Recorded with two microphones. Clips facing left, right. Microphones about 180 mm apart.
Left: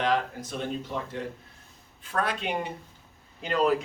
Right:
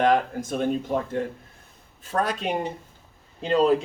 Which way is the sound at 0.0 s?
50° right (ahead or behind).